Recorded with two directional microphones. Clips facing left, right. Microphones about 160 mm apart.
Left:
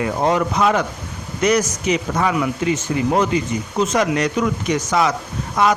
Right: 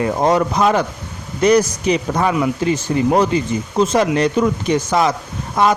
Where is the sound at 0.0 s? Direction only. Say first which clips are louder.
Right 3 dB; 35° right (ahead or behind).